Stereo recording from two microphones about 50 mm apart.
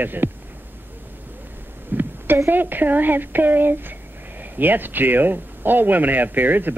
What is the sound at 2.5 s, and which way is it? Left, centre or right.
Speech, right.